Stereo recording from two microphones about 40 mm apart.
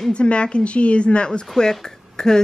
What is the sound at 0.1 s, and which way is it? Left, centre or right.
A woman's voice, left.